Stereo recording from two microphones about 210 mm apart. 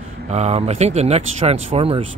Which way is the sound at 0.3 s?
30° right (ahead or behind).